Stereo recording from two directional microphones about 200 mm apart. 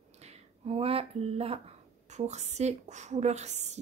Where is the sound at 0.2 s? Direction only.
30° right (ahead or behind).